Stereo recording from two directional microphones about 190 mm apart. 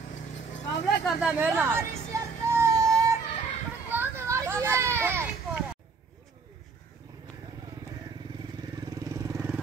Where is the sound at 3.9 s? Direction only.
15° right (ahead or behind).